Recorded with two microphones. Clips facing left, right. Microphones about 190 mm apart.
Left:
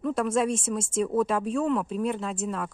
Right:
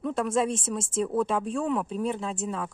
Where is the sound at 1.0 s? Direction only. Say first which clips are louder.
Left 1 dB; 5° left (ahead or behind).